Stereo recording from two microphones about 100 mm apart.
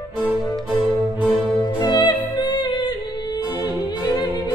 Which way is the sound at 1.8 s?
45° left (ahead or behind).